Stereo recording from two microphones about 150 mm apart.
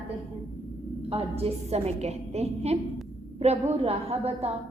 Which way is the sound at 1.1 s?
40° right (ahead or behind).